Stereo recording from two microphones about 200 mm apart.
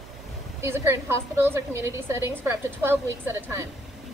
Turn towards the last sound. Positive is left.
turn(degrees=-10)  # may be behind; listen again after turning